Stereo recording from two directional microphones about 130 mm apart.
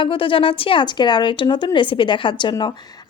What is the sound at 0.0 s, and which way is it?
Speech, 40° left (ahead or behind).